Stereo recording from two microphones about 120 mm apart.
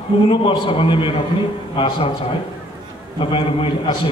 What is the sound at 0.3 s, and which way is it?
Speech, 50° left (ahead or behind).